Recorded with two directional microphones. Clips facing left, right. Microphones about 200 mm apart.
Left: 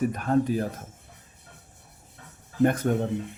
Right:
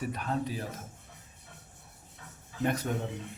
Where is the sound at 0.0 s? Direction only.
50° left (ahead or behind).